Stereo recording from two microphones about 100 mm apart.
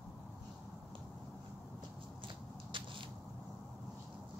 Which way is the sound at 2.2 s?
55° right (ahead or behind).